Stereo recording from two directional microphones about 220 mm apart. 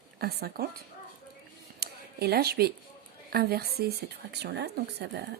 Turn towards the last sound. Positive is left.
turn(degrees=-50)  # may be behind; listen again after turning